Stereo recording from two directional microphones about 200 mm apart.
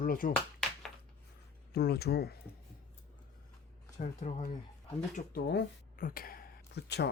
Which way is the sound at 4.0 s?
35° left (ahead or behind).